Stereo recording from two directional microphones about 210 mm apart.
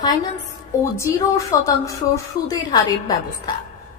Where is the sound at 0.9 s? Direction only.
15° left (ahead or behind).